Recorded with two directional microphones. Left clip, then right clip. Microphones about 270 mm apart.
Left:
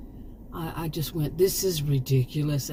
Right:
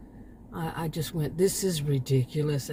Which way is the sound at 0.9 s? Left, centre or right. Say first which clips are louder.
Left 1 dB; right.